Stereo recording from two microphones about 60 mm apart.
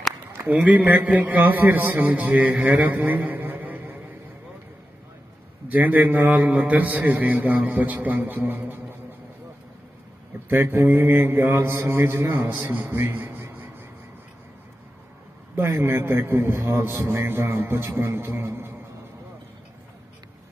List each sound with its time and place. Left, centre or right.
0.5 s a man's voice: right
2.8 s a sound: right
5.7 s a man's voice: right
10.5 s a man's voice: right
15.5 s a man's voice: right